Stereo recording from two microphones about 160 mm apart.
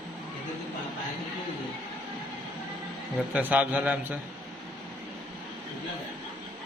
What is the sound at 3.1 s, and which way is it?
A man's voice, 10° right (ahead or behind).